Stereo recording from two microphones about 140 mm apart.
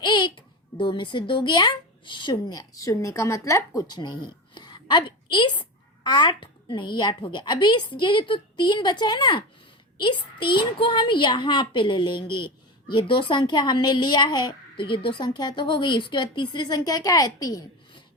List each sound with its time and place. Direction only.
0.0 s a child's voice: 35° left (ahead or behind)